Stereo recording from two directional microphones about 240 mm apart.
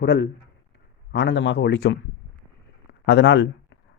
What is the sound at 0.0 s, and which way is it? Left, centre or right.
Speech, left.